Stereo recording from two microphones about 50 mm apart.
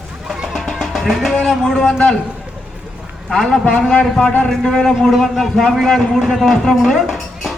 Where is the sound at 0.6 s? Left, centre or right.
Centre.